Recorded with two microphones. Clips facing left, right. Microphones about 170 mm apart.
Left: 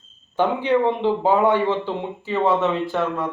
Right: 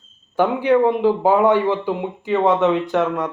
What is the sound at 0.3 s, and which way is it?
A man's voice, 10° right (ahead or behind).